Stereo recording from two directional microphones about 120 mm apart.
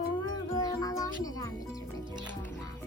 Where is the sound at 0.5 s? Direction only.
30° left (ahead or behind).